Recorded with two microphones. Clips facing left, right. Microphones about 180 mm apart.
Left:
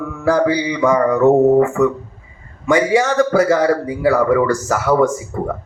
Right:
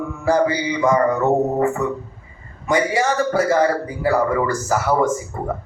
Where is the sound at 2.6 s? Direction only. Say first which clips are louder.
Left 4 dB; 90° left.